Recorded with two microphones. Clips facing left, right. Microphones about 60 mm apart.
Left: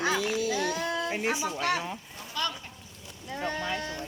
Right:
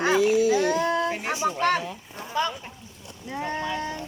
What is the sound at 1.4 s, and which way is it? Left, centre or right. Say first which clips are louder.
Speech: right 6 dB; right.